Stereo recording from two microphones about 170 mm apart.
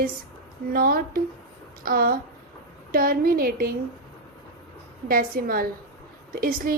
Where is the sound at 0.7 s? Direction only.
60° right (ahead or behind).